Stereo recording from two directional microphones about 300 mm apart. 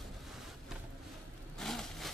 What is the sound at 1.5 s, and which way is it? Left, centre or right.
Vehicle, centre.